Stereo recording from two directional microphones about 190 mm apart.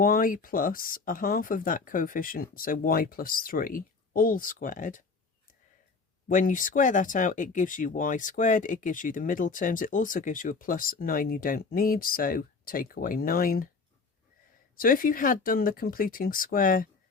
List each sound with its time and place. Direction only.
0.0 s speech: 50° left (ahead or behind)
6.2 s speech: 45° left (ahead or behind)
14.8 s speech: 45° left (ahead or behind)